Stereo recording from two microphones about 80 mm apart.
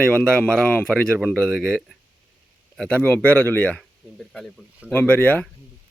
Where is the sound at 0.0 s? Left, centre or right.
Centre.